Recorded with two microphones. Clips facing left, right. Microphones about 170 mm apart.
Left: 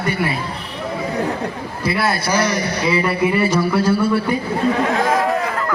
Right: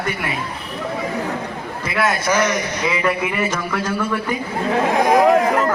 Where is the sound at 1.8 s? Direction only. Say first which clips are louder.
Even; 35° left (ahead or behind).